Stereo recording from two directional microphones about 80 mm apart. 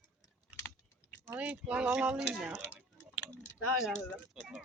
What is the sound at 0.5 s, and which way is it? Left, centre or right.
Typing, centre.